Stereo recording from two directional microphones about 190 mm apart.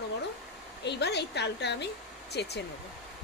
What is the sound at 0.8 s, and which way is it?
Speech, 60° left (ahead or behind).